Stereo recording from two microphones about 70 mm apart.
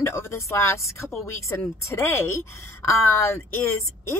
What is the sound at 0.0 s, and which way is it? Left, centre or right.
A woman's voice, left.